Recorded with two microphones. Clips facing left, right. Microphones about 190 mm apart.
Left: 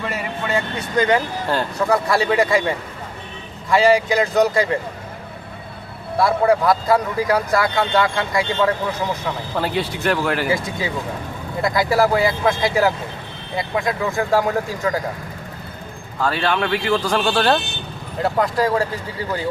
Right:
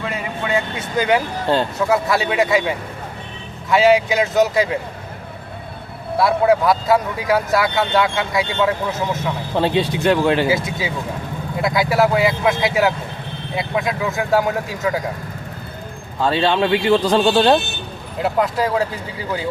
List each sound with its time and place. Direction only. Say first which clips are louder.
0.0 s speech: right 1 dB; centre (ahead or behind)
6.1 s speech: right 1 dB; centre (ahead or behind)
9.6 s speech: right 6 dB; 20° right (ahead or behind)
10.5 s speech: right 1 dB; 5° right (ahead or behind)
14.1 s speech: right 1 dB; centre (ahead or behind)
16.2 s speech: right 3 dB; 25° right (ahead or behind)
18.2 s speech: even; centre (ahead or behind)